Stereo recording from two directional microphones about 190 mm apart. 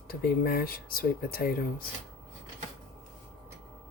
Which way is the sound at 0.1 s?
50° left (ahead or behind).